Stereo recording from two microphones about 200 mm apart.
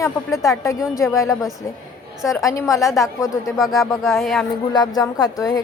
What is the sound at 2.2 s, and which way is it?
Speech, centre (ahead or behind).